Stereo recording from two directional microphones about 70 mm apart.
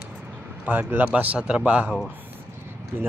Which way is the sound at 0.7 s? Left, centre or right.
Right.